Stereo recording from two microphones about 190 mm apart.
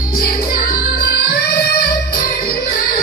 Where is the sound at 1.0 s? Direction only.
55° left (ahead or behind).